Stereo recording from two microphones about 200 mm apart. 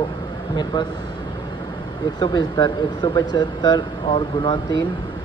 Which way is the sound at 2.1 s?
20° left (ahead or behind).